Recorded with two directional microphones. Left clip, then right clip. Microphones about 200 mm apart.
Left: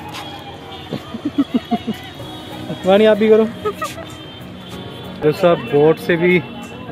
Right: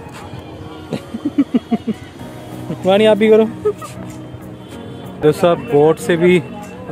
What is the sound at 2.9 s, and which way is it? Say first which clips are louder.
Speech: even; 30° right (ahead or behind).